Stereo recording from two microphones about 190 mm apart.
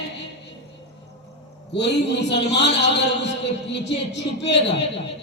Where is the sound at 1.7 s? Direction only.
65° left (ahead or behind).